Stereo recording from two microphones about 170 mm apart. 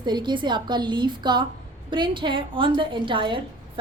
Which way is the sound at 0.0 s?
25° right (ahead or behind).